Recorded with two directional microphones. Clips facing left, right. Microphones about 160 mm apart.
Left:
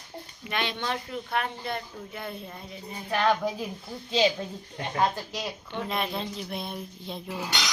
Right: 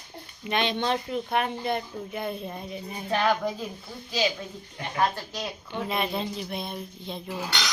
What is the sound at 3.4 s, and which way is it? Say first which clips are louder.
Speech: even; 10° left (ahead or behind).